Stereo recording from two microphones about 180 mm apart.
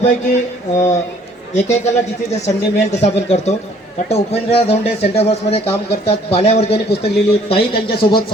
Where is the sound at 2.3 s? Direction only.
40° left (ahead or behind).